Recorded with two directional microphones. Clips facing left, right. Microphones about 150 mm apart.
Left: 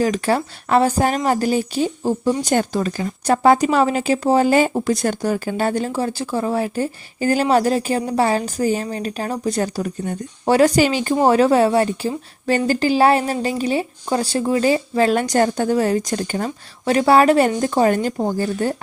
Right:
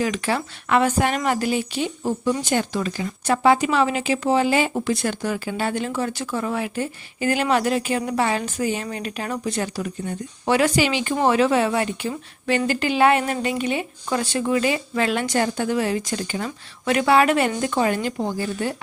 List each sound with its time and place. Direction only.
0.0 s a woman's voice: 40° left (ahead or behind)